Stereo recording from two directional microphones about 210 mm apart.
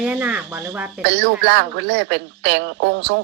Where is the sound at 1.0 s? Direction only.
55° right (ahead or behind).